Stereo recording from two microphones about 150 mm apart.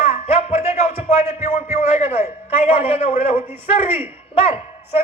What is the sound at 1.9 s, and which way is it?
A man's voice, 45° left (ahead or behind).